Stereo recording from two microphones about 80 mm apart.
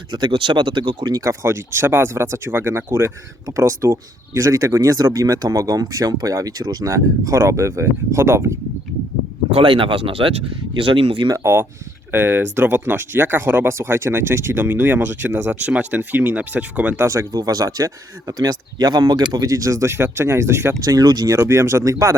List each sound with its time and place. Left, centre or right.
0.1 s speech: right
1.1 s speech: right
9.6 s speech: right
12.1 s speech: right
17.3 s speech: right
20.8 s speech: right
21.3 s speech: right